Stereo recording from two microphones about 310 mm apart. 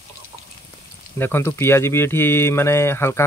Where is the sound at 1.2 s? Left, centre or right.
Centre.